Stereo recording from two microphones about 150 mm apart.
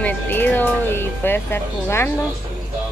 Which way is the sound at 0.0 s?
15° left (ahead or behind).